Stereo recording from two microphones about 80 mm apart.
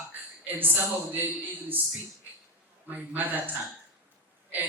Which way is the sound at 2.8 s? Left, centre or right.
Right.